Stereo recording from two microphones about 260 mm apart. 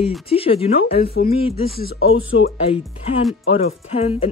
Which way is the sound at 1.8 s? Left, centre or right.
Left.